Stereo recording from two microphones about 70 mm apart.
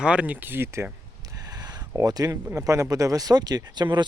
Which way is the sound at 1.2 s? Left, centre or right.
Right.